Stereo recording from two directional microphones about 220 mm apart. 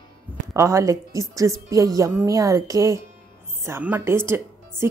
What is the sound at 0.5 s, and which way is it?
A woman's voice, 15° right (ahead or behind).